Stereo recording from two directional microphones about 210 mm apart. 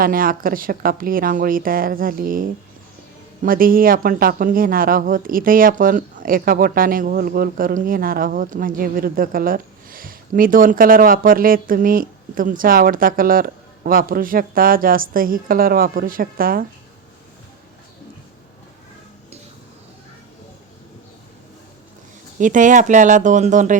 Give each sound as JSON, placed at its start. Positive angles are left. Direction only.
{"t": 0.0, "sound": "speech", "side_deg": -45}
{"t": 22.4, "sound": "speech", "side_deg": -35}